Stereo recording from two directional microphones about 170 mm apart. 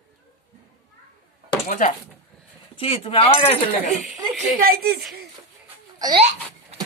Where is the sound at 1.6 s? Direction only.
50° left (ahead or behind).